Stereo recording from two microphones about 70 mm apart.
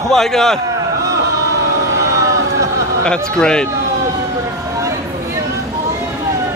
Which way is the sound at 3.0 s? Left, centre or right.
Centre.